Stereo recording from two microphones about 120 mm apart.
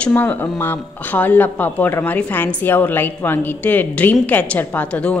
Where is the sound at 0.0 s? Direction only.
15° left (ahead or behind).